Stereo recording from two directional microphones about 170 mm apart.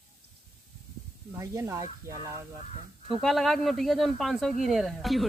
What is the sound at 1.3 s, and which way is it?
Speech, 15° right (ahead or behind).